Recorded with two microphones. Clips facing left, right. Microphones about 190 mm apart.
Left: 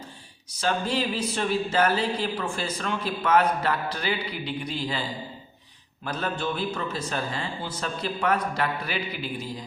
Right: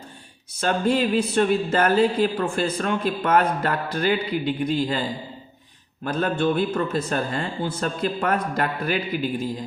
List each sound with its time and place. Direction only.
0.6 s a man's voice: 55° right (ahead or behind)
6.1 s a man's voice: 50° right (ahead or behind)